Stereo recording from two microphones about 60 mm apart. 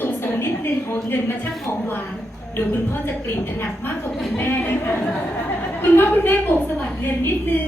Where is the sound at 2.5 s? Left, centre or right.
Left.